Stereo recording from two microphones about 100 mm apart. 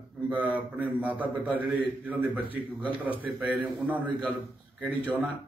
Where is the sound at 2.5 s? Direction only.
15° right (ahead or behind).